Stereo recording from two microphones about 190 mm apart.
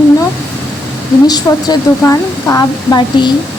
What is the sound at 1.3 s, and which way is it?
A woman's voice, 20° left (ahead or behind).